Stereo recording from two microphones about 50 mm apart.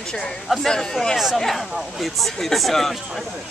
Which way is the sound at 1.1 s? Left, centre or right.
Centre.